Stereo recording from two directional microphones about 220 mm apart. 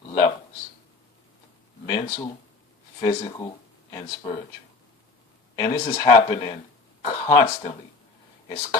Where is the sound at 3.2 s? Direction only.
20° left (ahead or behind).